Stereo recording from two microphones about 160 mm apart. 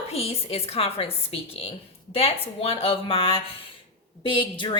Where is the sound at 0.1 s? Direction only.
40° left (ahead or behind).